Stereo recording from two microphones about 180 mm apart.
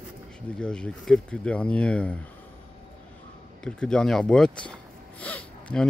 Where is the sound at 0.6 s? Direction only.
5° left (ahead or behind).